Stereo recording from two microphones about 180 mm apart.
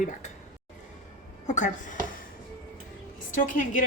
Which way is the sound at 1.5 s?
40° left (ahead or behind).